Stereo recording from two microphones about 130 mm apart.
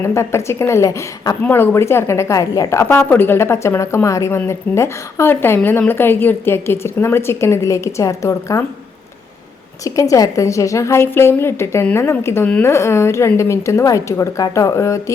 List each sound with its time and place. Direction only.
0.0 s a woman's voice: 20° left (ahead or behind)
1.5 s a woman's voice: 15° left (ahead or behind)
9.8 s a woman's voice: 25° left (ahead or behind)